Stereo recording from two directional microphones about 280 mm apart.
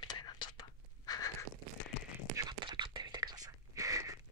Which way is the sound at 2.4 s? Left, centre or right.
Centre.